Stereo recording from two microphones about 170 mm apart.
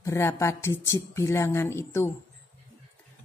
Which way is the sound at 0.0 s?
15° left (ahead or behind).